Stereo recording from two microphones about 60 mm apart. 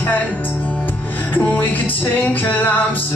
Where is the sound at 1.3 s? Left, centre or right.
Left.